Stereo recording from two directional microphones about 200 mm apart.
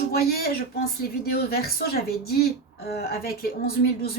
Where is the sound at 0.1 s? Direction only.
50° left (ahead or behind).